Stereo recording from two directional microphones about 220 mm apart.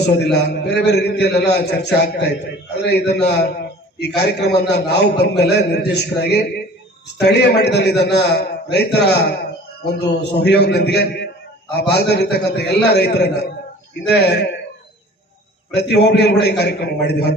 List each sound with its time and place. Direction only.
0.0 s a man's voice: 50° left (ahead or behind)
15.7 s a man's voice: 50° left (ahead or behind)